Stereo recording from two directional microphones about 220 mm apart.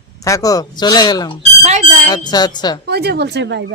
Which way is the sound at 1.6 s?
30° right (ahead or behind).